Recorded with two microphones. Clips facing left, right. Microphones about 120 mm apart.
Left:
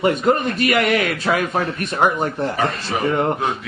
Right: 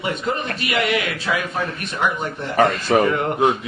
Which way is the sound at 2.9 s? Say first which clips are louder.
Right 7 dB; 50° right (ahead or behind).